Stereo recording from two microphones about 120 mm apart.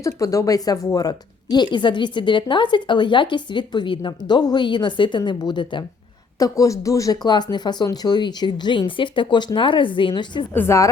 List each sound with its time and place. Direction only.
0.0 s speech: 25° left (ahead or behind)
6.4 s a woman's voice: 25° left (ahead or behind)
10.5 s a woman's voice: 20° left (ahead or behind)